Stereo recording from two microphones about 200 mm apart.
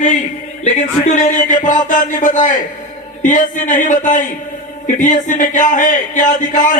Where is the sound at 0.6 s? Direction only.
35° left (ahead or behind).